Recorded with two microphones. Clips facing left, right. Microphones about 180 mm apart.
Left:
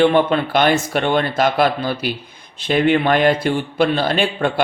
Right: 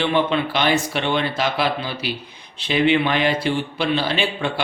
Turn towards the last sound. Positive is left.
turn(degrees=50)  # may be behind; listen again after turning